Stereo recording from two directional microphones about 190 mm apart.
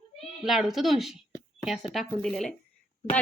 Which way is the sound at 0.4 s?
Centre (ahead or behind).